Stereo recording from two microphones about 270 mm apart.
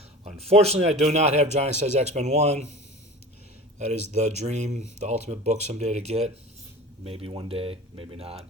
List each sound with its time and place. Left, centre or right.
0.3 s speech: right
3.8 s speech: right